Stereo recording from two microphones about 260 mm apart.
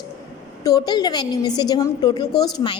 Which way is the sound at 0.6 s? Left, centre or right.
Centre.